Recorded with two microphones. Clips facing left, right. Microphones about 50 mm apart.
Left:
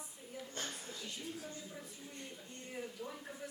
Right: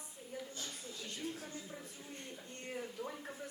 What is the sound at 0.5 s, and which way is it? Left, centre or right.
Speech, left.